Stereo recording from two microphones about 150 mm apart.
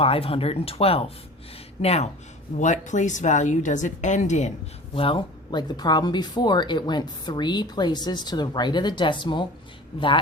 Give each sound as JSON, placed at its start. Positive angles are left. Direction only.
{"t": 0.0, "sound": "speech", "side_deg": 40}
{"t": 4.9, "sound": "speech", "side_deg": 35}